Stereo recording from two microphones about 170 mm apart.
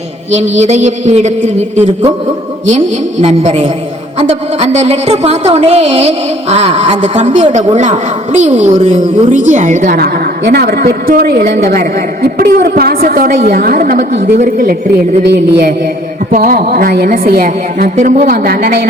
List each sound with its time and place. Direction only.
0.3 s a woman's voice: 40° right (ahead or behind)
15.3 s speech: 80° right
16.3 s a woman's voice: 55° right (ahead or behind)
17.9 s a woman's voice: 45° right (ahead or behind)